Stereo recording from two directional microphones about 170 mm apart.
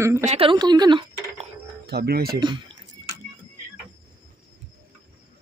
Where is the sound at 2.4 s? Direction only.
30° right (ahead or behind).